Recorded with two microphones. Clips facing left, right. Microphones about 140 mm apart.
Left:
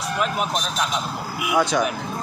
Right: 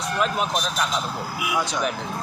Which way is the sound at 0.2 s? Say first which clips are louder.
Right 1 dB; 5° left (ahead or behind).